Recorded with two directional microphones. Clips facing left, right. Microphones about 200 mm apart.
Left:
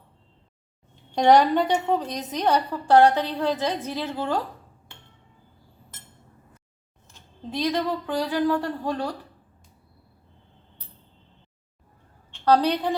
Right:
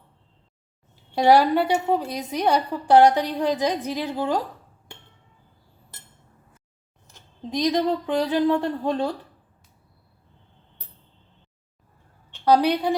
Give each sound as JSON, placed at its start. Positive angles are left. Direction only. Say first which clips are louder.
{"t": 1.1, "sound": "a woman's voice", "louder": "even", "side_deg": -5}
{"t": 7.1, "sound": "speech", "louder": "right 3 dB", "side_deg": -15}
{"t": 12.5, "sound": "a woman's voice", "louder": "right 2 dB", "side_deg": -10}